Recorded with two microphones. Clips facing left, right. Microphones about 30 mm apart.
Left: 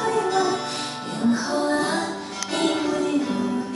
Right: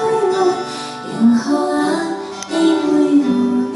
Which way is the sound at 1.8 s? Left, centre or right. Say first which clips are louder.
Right 7 dB; centre.